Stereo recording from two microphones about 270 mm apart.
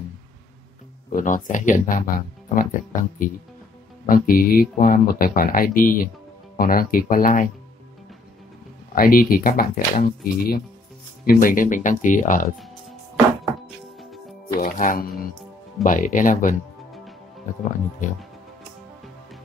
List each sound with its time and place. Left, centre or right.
1.1 s speech: left
8.9 s speech: left
14.6 s speech: left